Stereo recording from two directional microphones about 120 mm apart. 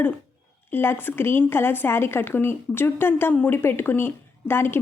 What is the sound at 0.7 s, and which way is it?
Speech, 20° left (ahead or behind).